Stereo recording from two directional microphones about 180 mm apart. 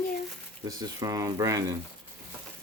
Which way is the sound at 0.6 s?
20° right (ahead or behind).